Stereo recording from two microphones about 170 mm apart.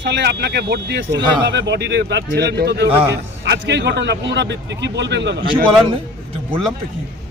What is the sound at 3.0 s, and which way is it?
A man's voice, 85° right.